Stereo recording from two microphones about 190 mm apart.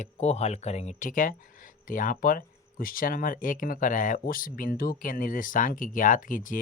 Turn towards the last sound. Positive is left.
turn(degrees=45)  # may be behind; listen again after turning